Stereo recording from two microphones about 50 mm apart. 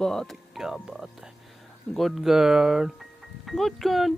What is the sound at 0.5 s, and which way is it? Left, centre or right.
Speech, centre.